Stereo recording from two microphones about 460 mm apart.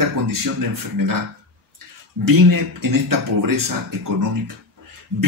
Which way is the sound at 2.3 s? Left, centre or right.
Right.